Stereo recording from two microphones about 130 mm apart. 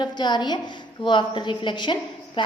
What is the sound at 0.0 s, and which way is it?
A woman's voice, 35° left (ahead or behind).